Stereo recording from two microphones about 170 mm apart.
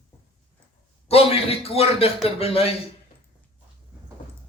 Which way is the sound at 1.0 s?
35° left (ahead or behind).